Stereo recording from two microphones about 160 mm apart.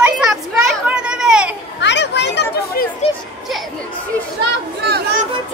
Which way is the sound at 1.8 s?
90° left.